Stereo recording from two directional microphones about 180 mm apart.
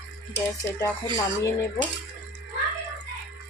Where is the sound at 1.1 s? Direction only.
20° left (ahead or behind).